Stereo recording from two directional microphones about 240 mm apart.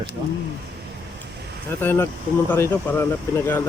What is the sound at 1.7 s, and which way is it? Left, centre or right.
Speech, centre.